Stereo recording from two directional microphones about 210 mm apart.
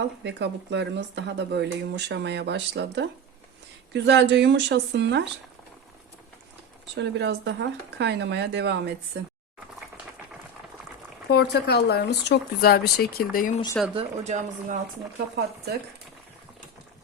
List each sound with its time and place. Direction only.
0.3 s speech: 55° right (ahead or behind)
6.9 s speech: 55° right (ahead or behind)
11.3 s speech: 50° left (ahead or behind)
13.9 s speech: 35° right (ahead or behind)